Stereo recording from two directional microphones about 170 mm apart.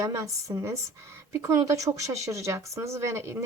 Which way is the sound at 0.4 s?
20° right (ahead or behind).